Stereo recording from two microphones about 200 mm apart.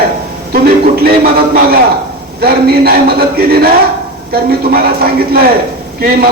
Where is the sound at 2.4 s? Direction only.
50° right (ahead or behind).